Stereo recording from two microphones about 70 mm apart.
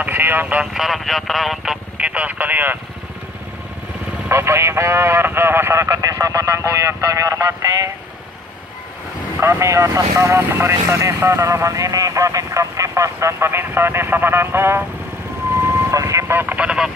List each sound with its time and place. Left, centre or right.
0.0 s speech: right
0.7 s speech: centre
2.0 s speech: right
4.3 s speech: right
9.4 s speech: right
15.9 s vehicle: right
16.3 s radio: right